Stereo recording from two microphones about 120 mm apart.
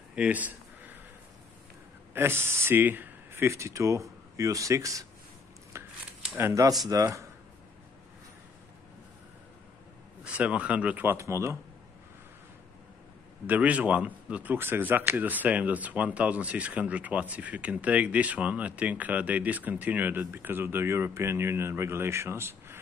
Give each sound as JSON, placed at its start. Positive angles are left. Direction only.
{"t": 0.1, "sound": "a sound", "side_deg": -10}
{"t": 2.1, "sound": "speech", "side_deg": -20}
{"t": 6.2, "sound": "speech", "side_deg": -20}
{"t": 10.2, "sound": "speech", "side_deg": -10}
{"t": 11.1, "sound": "speech", "side_deg": -25}
{"t": 13.5, "sound": "speech", "side_deg": -10}